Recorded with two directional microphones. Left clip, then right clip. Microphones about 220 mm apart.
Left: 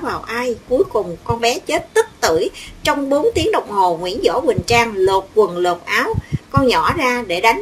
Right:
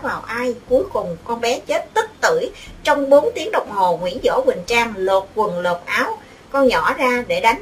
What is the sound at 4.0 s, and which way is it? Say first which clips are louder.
A woman's voice: left 1 dB; 40° left (ahead or behind).